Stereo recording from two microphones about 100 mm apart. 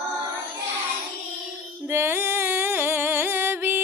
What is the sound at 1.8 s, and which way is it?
Music, 25° right (ahead or behind).